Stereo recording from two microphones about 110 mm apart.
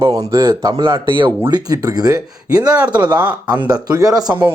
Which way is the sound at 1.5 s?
35° right (ahead or behind).